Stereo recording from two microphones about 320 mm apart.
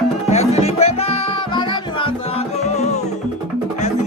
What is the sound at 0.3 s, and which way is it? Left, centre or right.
Music, centre.